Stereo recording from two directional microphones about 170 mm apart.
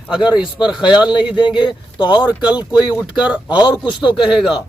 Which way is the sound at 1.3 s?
25° left (ahead or behind).